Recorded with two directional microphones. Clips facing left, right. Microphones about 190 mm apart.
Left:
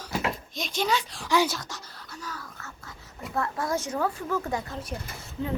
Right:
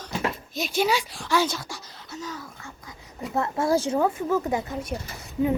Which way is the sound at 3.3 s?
25° right (ahead or behind).